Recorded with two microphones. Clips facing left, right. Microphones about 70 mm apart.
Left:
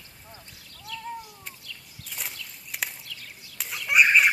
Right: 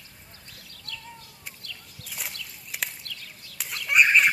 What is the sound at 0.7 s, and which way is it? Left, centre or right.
Bird, centre.